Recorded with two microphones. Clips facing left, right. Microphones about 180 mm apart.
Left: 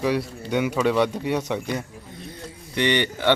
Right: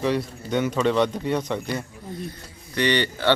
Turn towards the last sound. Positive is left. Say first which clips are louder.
# even
turn(degrees=20)  # may be behind; listen again after turning